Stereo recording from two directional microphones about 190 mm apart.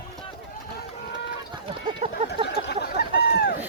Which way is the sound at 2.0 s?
35° right (ahead or behind).